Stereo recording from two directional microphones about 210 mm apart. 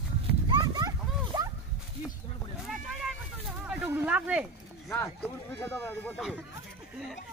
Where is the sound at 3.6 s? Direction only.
5° right (ahead or behind).